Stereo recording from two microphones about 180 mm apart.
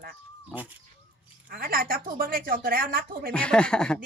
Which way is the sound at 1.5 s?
55° right (ahead or behind).